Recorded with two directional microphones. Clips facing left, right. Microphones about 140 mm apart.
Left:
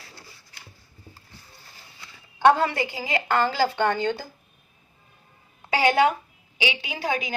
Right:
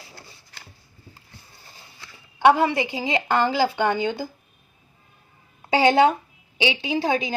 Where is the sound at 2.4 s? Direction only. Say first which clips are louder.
Right 2 dB; 10° right (ahead or behind).